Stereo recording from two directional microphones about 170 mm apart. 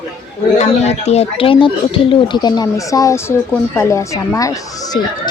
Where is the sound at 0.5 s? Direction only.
40° left (ahead or behind).